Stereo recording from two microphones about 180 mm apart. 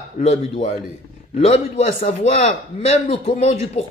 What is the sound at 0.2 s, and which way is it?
A man's voice, 35° left (ahead or behind).